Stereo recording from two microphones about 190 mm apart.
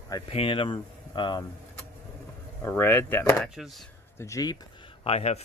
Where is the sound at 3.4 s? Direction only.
Centre (ahead or behind).